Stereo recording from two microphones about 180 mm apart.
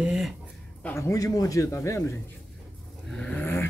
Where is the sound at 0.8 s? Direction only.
15° left (ahead or behind).